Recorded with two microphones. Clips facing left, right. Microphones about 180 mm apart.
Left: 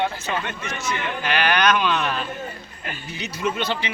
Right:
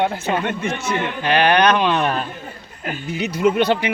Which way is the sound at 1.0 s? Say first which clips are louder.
Right 6 dB; 30° right (ahead or behind).